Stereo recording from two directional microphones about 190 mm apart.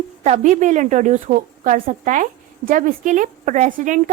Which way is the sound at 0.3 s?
40° right (ahead or behind).